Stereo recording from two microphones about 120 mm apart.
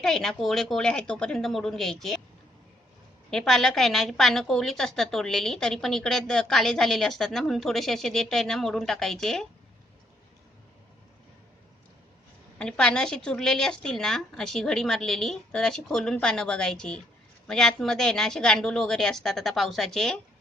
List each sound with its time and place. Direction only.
0.0 s a woman's voice: 5° left (ahead or behind)
3.2 s a woman's voice: 5° left (ahead or behind)
12.5 s a woman's voice: 5° left (ahead or behind)